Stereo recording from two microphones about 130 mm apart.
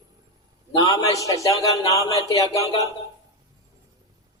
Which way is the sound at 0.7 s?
25° left (ahead or behind).